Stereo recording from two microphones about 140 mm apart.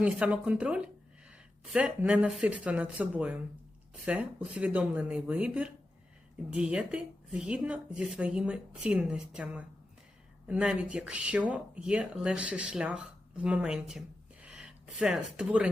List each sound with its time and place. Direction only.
0.0 s speech: 10° right (ahead or behind)